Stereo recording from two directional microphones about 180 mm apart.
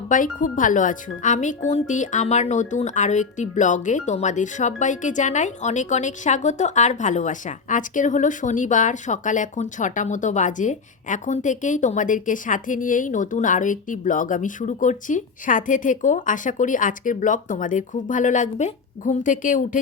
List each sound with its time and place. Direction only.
0.1 s speech: 45° left (ahead or behind)